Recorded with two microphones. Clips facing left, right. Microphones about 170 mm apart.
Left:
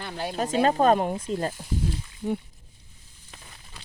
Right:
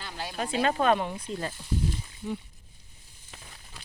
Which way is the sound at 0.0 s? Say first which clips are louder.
Left 5 dB; 55° left (ahead or behind).